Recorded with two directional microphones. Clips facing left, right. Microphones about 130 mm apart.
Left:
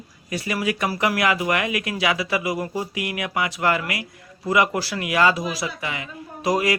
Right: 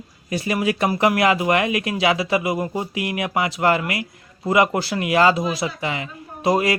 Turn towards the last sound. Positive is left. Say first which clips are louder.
# right 2 dB
turn(degrees=-25)  # may be behind; listen again after turning